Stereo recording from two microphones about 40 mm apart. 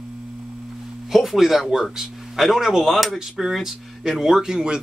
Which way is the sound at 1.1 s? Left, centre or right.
Centre.